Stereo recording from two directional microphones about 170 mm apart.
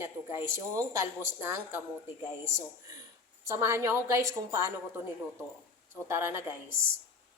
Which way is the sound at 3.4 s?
15° right (ahead or behind).